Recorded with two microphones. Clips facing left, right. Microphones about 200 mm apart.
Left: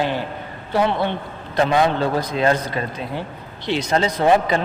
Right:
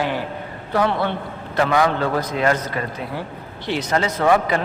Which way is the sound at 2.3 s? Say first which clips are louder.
Left 1 dB; 25° left (ahead or behind).